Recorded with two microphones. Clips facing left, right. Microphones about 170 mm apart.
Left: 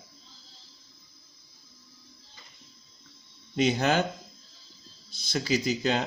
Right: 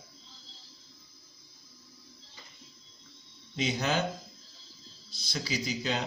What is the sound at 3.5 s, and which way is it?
Speech, 55° left (ahead or behind).